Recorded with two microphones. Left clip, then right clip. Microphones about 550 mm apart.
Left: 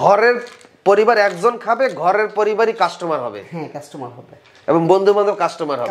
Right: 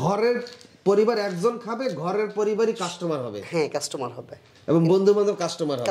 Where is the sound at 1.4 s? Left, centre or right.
Left.